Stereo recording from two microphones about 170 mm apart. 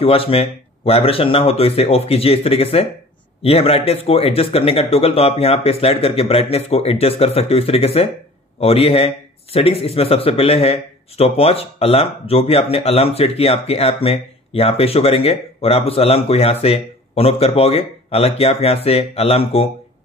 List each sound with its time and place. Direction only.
0.0 s a man's voice: 35° left (ahead or behind)